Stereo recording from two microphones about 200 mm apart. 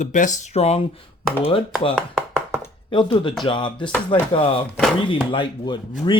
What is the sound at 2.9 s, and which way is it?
Speech, 25° left (ahead or behind).